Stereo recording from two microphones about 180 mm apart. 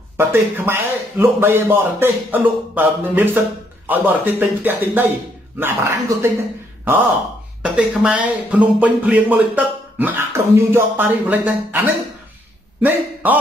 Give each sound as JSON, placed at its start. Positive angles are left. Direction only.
{"t": 0.2, "sound": "a man's voice", "side_deg": -15}
{"t": 7.6, "sound": "a man's voice", "side_deg": -5}